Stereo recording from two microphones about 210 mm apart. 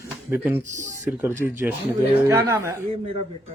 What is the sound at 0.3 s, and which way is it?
Speech, 10° right (ahead or behind).